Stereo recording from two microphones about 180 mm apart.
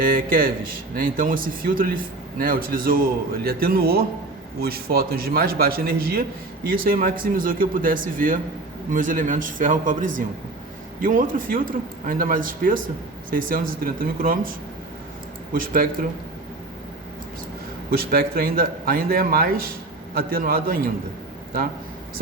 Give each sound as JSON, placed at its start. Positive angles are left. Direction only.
{"t": 0.0, "sound": "a man's voice", "side_deg": -50}
{"t": 15.5, "sound": "speech", "side_deg": -50}
{"t": 17.9, "sound": "a man's voice", "side_deg": -55}